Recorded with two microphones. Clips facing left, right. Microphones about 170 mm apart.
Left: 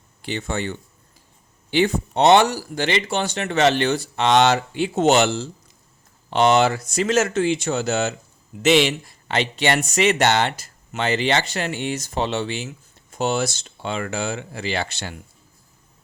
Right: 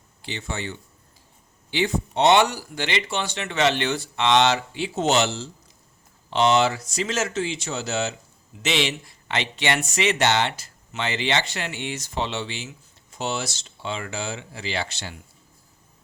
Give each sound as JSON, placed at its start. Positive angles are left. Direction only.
{"t": 0.3, "sound": "speech", "side_deg": 50}